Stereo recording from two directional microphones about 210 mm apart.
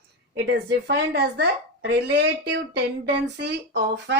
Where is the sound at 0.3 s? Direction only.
55° right (ahead or behind).